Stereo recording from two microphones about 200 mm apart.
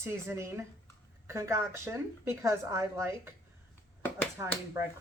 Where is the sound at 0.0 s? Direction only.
15° right (ahead or behind).